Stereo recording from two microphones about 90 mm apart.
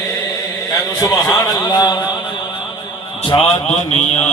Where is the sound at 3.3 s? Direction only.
60° left (ahead or behind).